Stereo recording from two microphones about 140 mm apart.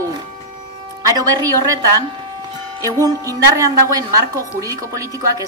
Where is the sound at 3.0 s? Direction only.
25° right (ahead or behind).